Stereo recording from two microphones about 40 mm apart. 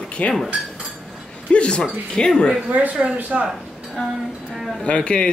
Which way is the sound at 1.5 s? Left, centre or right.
Left.